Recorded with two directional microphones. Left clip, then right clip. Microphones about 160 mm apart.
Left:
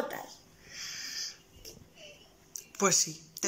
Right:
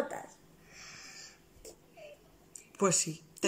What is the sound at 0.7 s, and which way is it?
Wheeze, 20° right (ahead or behind).